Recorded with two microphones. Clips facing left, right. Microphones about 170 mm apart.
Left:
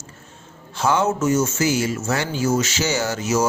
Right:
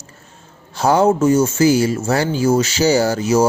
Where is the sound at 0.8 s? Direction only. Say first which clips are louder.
Right 6 dB; 35° right (ahead or behind).